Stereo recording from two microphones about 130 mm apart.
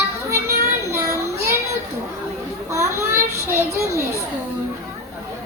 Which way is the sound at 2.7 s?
20° right (ahead or behind).